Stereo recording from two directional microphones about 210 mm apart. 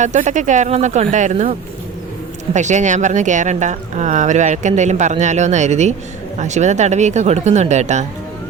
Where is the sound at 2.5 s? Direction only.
35° right (ahead or behind).